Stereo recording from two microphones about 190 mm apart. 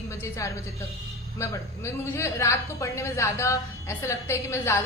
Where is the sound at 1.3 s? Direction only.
15° left (ahead or behind).